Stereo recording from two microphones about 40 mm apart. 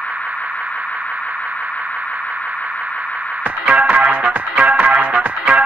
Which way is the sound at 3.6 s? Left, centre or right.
Right.